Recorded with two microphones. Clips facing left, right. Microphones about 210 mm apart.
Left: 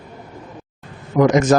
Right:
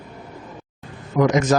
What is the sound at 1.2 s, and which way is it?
Speech, 50° left (ahead or behind).